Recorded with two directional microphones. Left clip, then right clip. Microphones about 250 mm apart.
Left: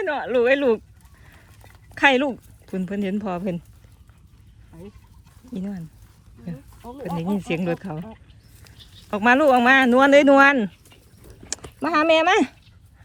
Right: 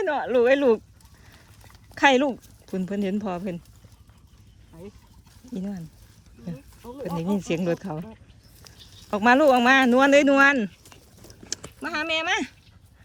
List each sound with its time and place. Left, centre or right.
0.0 s speech: centre
1.3 s a sound: centre
5.5 s speech: centre
12.0 s speech: centre